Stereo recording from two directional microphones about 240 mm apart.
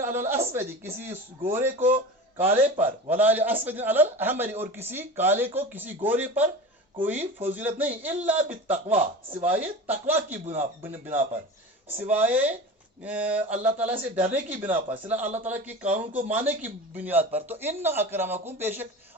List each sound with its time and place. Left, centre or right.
0.0 s a woman's voice: centre
10.4 s a man's voice: right
10.9 s a man's voice: centre
13.0 s a sound: centre
14.0 s a man's voice: centre